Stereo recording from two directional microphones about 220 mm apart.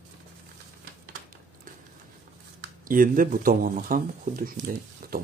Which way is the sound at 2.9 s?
40° right (ahead or behind).